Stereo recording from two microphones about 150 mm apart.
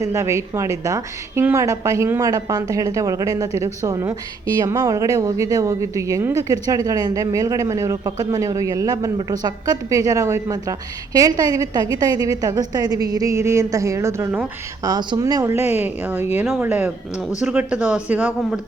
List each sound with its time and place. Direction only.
0.0 s a woman's voice: 20° right (ahead or behind)